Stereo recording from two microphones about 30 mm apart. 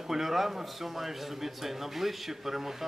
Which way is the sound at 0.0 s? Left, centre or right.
Centre.